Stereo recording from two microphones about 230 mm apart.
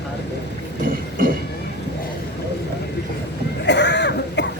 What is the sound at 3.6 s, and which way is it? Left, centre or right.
Cough, left.